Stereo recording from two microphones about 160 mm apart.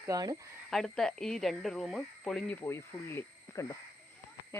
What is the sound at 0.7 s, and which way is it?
Speech, centre (ahead or behind).